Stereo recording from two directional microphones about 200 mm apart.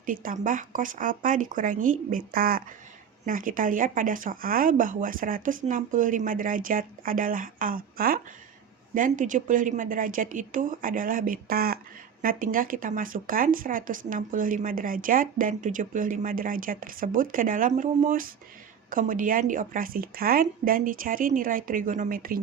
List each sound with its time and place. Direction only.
0.0 s speech: 45° right (ahead or behind)